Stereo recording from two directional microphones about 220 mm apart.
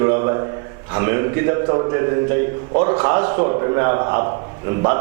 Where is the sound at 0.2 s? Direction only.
25° right (ahead or behind).